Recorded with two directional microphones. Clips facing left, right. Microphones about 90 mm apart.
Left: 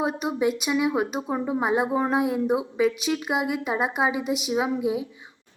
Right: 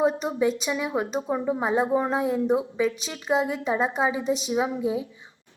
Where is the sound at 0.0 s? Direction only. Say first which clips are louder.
Right 2 dB; 10° left (ahead or behind).